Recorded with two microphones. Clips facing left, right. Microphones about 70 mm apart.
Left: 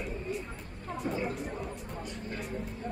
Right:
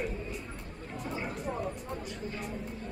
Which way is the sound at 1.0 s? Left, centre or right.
Left.